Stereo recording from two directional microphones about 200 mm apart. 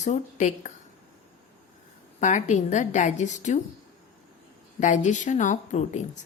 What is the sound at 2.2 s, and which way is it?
A woman's voice, 35° left (ahead or behind).